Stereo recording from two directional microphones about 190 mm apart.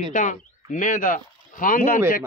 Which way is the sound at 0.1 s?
45° left (ahead or behind).